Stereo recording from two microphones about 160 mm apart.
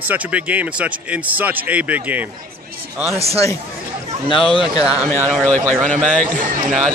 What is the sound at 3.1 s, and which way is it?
Speech, 40° right (ahead or behind).